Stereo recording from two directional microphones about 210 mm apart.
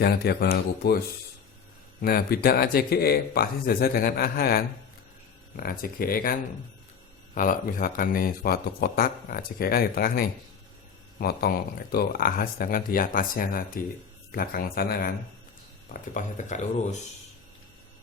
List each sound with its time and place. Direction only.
0.0 s speech: 50° left (ahead or behind)
7.3 s speech: 40° left (ahead or behind)